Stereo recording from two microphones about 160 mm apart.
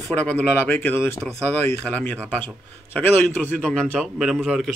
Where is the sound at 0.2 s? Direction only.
10° left (ahead or behind).